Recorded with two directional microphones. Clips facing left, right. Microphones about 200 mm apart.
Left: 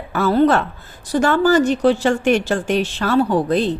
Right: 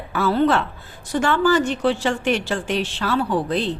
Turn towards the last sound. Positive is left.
turn(degrees=45)  # may be behind; listen again after turning